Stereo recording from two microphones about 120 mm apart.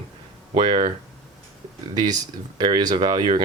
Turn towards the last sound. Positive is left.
turn(degrees=-40)  # may be behind; listen again after turning